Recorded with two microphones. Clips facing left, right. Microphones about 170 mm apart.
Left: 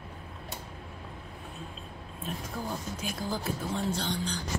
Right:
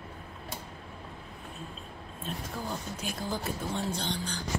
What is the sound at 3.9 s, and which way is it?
Speech, centre (ahead or behind).